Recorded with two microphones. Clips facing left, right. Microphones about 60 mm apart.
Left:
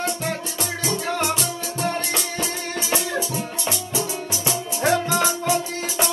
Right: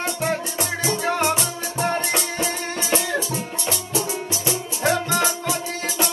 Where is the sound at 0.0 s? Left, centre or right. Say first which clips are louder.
Right 2 dB; right.